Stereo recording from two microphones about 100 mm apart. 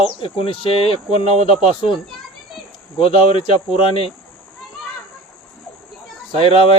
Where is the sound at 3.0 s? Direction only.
70° left (ahead or behind).